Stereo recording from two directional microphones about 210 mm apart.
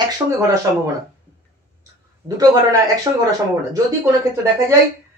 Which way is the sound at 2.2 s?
15° right (ahead or behind).